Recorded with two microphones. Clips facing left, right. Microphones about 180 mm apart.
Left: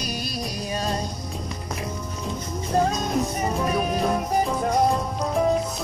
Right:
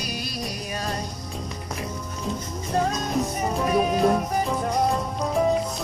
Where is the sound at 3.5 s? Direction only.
Centre (ahead or behind).